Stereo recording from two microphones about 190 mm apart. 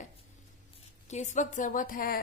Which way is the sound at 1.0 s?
40° left (ahead or behind).